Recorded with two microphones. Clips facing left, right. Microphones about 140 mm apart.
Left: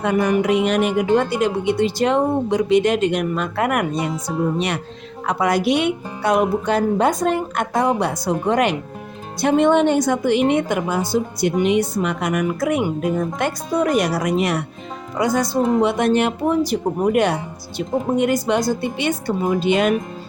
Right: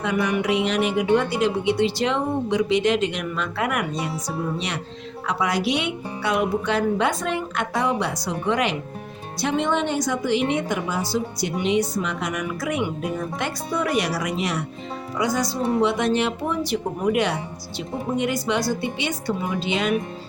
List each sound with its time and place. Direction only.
0.0 s a woman's voice: 45° left (ahead or behind)